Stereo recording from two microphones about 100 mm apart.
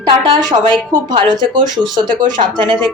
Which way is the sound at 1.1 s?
50° right (ahead or behind).